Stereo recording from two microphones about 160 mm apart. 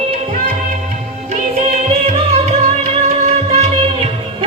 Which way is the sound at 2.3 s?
40° right (ahead or behind).